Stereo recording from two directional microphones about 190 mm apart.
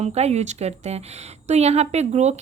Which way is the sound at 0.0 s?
35° right (ahead or behind).